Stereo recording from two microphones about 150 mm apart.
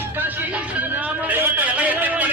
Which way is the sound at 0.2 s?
10° right (ahead or behind).